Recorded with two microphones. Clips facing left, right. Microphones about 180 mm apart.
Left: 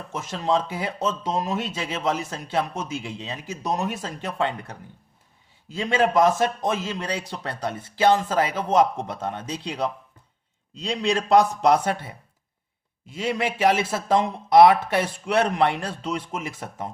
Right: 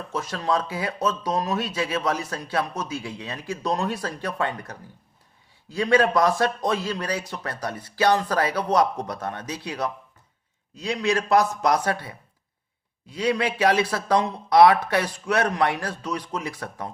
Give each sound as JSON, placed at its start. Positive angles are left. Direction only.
{"t": 0.1, "sound": "speech", "side_deg": 25}
{"t": 10.8, "sound": "speech", "side_deg": 30}
{"t": 13.1, "sound": "speech", "side_deg": 20}